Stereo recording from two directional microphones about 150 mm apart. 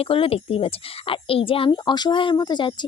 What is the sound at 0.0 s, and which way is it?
Speech, 40° left (ahead or behind).